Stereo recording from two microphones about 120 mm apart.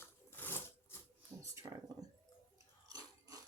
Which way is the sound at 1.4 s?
25° right (ahead or behind).